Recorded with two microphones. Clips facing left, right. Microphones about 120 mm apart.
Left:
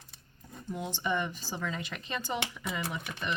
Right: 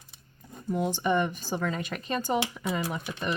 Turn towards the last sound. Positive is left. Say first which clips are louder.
# right 4 dB
turn(degrees=-35)  # may be behind; listen again after turning